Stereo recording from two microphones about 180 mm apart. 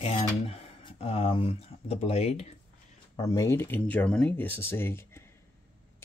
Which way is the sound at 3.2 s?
15° left (ahead or behind).